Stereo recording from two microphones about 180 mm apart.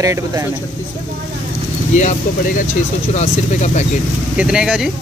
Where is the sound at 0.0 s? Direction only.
15° right (ahead or behind).